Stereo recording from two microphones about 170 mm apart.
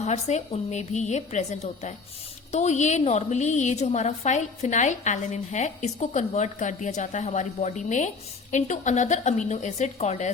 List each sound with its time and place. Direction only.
0.0 s a woman's voice: 40° left (ahead or behind)